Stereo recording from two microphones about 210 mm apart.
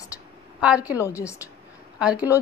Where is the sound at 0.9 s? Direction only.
15° left (ahead or behind).